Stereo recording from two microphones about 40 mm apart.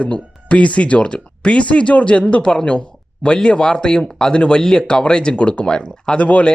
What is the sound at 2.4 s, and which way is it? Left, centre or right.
A woman's voice, centre.